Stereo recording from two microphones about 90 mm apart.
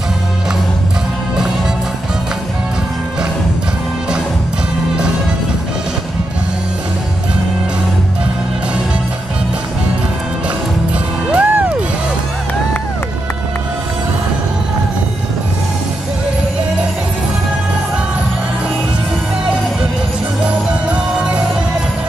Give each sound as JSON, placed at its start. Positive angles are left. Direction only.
{"t": 11.3, "sound": "music", "side_deg": -15}
{"t": 20.4, "sound": "music", "side_deg": -10}